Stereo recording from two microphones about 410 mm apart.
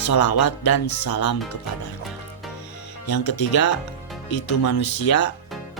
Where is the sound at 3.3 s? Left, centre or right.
Left.